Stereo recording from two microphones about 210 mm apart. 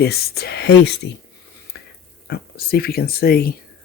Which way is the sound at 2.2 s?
45° left (ahead or behind).